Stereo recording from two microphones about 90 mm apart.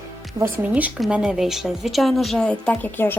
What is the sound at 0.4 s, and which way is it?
Speech, 40° right (ahead or behind).